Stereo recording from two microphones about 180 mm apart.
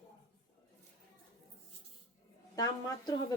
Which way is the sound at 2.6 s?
20° left (ahead or behind).